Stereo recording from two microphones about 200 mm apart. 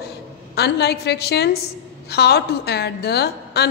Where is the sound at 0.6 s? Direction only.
55° left (ahead or behind).